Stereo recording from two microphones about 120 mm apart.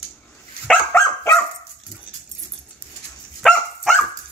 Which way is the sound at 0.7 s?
15° left (ahead or behind).